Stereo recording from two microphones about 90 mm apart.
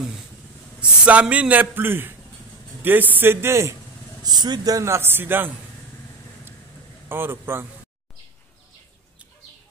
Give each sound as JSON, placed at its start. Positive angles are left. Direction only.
{"t": 0.7, "sound": "a man's voice", "side_deg": -15}
{"t": 4.2, "sound": "a man's voice", "side_deg": -50}
{"t": 7.1, "sound": "a man's voice", "side_deg": -25}